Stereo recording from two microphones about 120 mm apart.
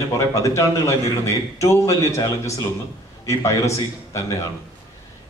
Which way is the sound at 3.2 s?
25° left (ahead or behind).